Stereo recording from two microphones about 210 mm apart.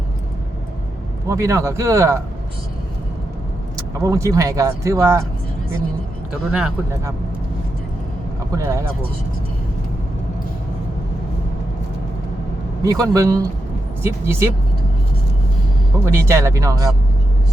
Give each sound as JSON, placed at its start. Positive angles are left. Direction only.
{"t": 1.3, "sound": "speech", "side_deg": -15}
{"t": 4.0, "sound": "speech", "side_deg": -15}
{"t": 6.5, "sound": "speech", "side_deg": -5}
{"t": 8.5, "sound": "speech", "side_deg": -15}
{"t": 12.8, "sound": "speech", "side_deg": -15}
{"t": 16.0, "sound": "speech", "side_deg": -10}